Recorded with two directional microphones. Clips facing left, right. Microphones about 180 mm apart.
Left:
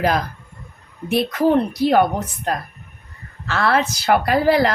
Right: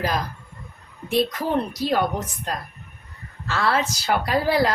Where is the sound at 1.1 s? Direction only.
65° left (ahead or behind).